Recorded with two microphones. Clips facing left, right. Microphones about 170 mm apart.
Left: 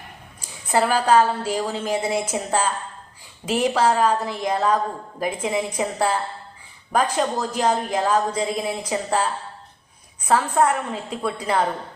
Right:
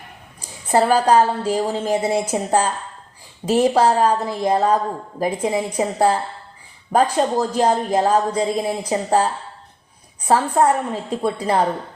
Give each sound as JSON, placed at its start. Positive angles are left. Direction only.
{"t": 0.4, "sound": "speech", "side_deg": -35}